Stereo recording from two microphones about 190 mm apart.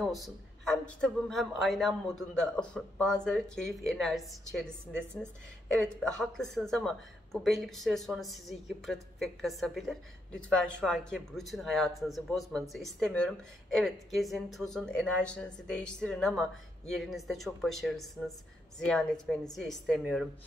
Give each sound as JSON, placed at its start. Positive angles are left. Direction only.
{"t": 0.0, "sound": "a man's voice", "side_deg": 0}